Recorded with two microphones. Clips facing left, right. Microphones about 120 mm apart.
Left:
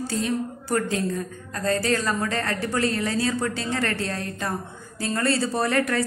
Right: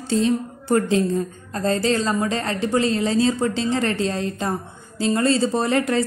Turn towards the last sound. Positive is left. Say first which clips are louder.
# right 3 dB
turn(degrees=-20)  # may be behind; listen again after turning